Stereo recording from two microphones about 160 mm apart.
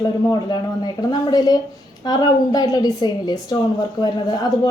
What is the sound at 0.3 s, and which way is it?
A woman's voice, 25° left (ahead or behind).